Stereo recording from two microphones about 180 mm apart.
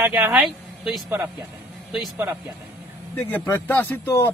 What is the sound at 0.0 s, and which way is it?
Speech, 10° right (ahead or behind).